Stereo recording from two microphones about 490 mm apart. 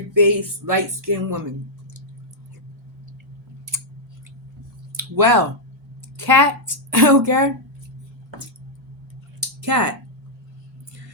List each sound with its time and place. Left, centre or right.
0.2 s a woman's voice: right
4.9 s a woman's voice: right
9.6 s speech: right